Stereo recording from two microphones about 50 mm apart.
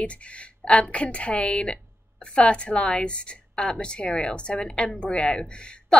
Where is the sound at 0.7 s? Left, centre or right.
Left.